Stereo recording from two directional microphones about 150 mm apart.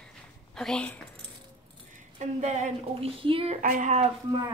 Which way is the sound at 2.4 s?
50° right (ahead or behind).